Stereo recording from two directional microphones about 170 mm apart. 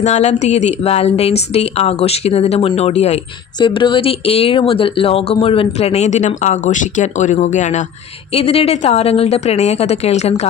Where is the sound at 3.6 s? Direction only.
30° left (ahead or behind).